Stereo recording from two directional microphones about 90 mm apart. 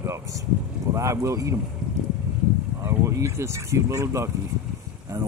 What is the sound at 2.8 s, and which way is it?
Speech, 30° right (ahead or behind).